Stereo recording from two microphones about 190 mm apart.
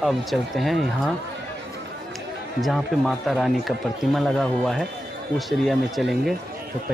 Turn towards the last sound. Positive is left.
turn(degrees=0)  # may be behind; listen again after turning